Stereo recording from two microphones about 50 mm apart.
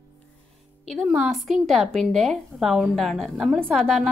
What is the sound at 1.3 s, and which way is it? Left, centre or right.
A woman's voice, centre.